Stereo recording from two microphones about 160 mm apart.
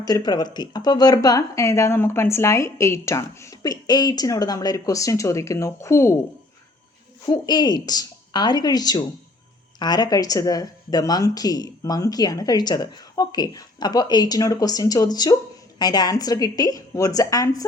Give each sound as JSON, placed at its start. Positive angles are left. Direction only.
{"t": 0.0, "sound": "speech", "side_deg": 25}
{"t": 7.3, "sound": "speech", "side_deg": 25}